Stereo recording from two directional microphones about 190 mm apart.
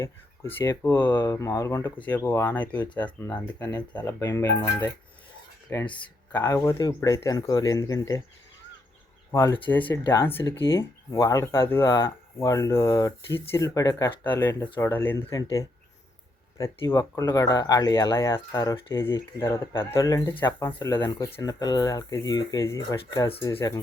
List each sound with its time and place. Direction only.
0.5 s speech: 15° left (ahead or behind)
3.6 s speech: 20° left (ahead or behind)
9.3 s speech: 15° left (ahead or behind)